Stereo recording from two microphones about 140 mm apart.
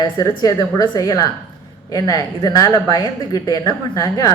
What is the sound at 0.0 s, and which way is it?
Speech, 25° left (ahead or behind).